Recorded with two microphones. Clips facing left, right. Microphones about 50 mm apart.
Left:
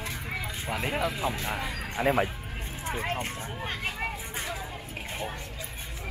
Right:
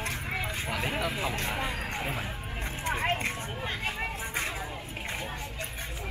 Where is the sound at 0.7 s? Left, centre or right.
Centre.